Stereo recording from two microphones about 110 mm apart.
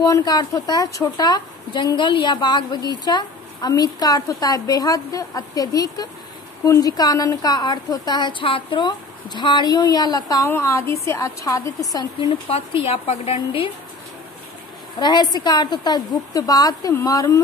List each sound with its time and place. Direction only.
0.0 s a woman's voice: 35° left (ahead or behind)
10.4 s a woman's voice: 25° left (ahead or behind)
12.4 s a woman's voice: 60° left (ahead or behind)
15.0 s a woman's voice: 40° left (ahead or behind)